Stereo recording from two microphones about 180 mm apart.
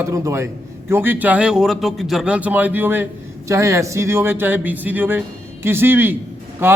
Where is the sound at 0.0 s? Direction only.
15° right (ahead or behind).